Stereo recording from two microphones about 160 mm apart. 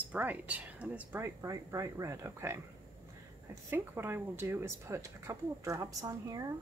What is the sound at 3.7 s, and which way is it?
Speech, 15° right (ahead or behind).